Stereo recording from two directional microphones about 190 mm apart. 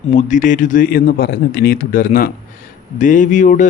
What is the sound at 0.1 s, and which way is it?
A man's voice, 40° left (ahead or behind).